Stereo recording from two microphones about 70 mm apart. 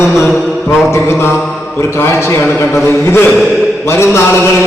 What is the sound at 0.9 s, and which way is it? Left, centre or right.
A man's voice, left.